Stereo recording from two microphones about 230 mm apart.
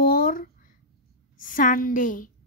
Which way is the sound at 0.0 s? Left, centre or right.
Left.